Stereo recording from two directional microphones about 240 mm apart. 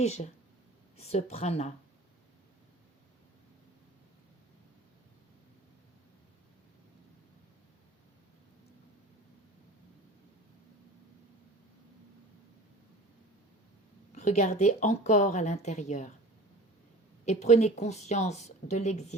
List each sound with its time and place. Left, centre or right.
0.0 s a woman's voice: left
14.2 s a woman's voice: left
17.2 s a woman's voice: left